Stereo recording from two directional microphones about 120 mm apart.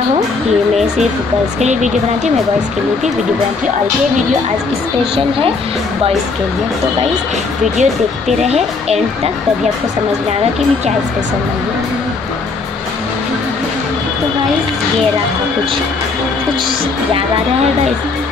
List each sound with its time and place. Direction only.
1.6 s speech: 80° right
7.7 s speech: 75° right (ahead or behind)